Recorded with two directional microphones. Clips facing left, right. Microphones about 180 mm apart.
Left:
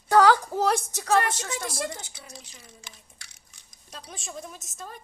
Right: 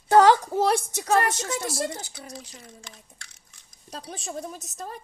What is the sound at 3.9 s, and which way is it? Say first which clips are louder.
A woman's voice: right 5 dB; 35° right (ahead or behind).